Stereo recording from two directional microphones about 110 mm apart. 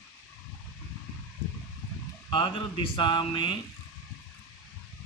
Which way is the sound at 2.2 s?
50° left (ahead or behind).